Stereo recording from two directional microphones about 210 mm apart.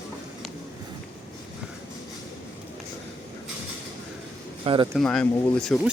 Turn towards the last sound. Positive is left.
turn(degrees=0)  # may be behind; listen again after turning